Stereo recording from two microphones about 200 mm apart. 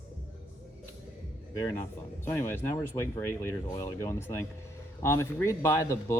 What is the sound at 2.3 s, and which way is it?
Speech, 10° left (ahead or behind).